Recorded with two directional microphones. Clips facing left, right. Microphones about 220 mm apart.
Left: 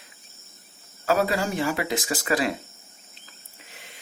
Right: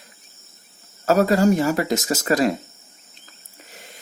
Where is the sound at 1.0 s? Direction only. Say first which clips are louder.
Right 7 dB; 40° right (ahead or behind).